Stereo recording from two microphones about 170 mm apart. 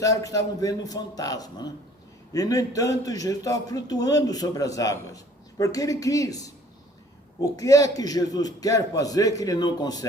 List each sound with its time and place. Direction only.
0.0 s a man's voice: 20° left (ahead or behind)
7.5 s a man's voice: 20° left (ahead or behind)